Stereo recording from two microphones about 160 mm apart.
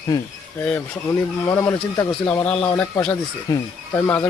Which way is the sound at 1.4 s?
15° left (ahead or behind).